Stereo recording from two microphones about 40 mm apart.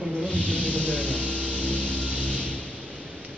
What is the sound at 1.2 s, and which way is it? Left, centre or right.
Music, left.